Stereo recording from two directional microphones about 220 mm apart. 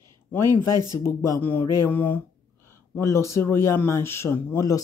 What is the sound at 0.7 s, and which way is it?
Speech, 20° right (ahead or behind).